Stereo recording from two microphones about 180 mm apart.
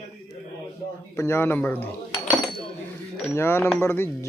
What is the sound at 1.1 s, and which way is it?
Speech, 15° left (ahead or behind).